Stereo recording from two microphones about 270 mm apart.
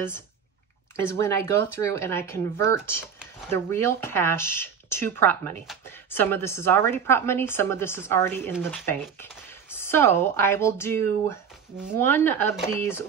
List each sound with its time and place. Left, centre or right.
1.0 s speech: centre